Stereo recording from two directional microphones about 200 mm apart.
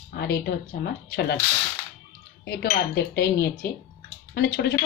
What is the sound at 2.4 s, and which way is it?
A woman's voice, 55° left (ahead or behind).